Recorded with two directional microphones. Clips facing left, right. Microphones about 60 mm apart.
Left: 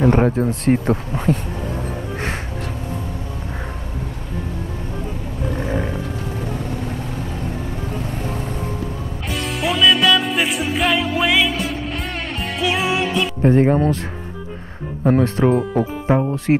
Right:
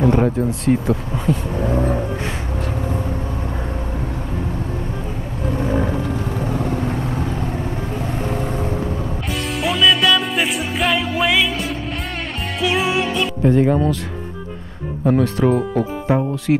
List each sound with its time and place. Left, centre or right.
0.0 s speech: left
1.7 s vehicle: right
9.6 s music: centre
13.4 s speech: left
15.0 s speech: left
15.4 s speech: centre
16.5 s speech: left